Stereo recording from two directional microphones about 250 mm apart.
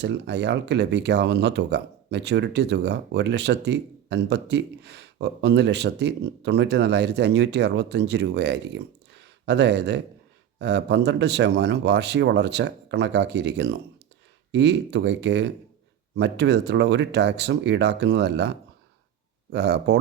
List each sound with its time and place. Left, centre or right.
0.0 s speech: right